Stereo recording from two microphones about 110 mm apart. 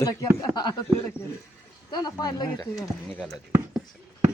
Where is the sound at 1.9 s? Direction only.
40° left (ahead or behind).